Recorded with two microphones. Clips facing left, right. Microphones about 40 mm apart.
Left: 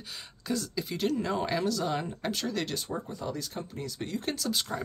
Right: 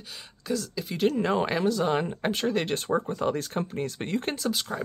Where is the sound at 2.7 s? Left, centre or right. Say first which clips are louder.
Right 8 dB; right.